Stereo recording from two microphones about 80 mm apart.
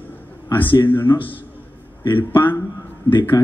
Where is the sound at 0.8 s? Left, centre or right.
Left.